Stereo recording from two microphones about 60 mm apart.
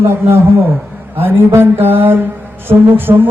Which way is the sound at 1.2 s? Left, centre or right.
Right.